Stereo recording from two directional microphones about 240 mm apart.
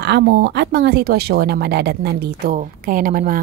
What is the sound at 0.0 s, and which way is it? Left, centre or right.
Speech, right.